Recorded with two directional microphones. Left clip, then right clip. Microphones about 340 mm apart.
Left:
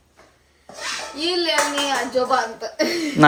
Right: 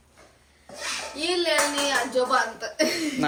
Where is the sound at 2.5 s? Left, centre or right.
Centre.